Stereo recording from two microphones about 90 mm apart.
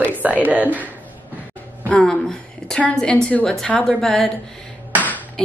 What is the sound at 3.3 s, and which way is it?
Speech, 5° left (ahead or behind).